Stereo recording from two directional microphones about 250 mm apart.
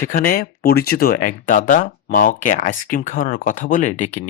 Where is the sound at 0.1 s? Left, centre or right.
Left.